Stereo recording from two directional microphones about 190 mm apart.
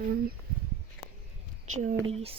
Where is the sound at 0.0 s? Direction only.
50° right (ahead or behind).